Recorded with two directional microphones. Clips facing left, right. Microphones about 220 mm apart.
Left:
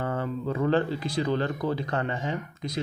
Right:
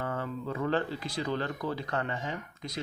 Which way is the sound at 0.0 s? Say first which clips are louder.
Left 5 dB; 30° left (ahead or behind).